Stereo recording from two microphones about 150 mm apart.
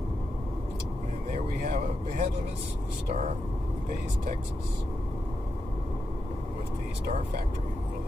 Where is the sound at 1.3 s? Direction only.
55° right (ahead or behind).